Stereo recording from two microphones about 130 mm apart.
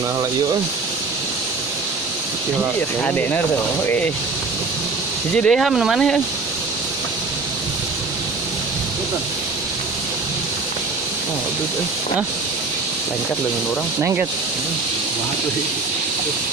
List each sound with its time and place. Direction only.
3.0 s speech: 15° left (ahead or behind)
5.4 s speech: 5° left (ahead or behind)
14.0 s speech: 20° right (ahead or behind)